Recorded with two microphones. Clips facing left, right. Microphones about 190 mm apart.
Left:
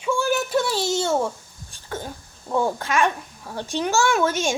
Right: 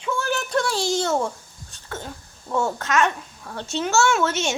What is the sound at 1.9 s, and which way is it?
A child's voice, 15° left (ahead or behind).